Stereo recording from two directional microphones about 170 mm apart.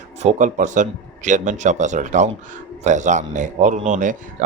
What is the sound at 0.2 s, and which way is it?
A man's voice, 45° right (ahead or behind).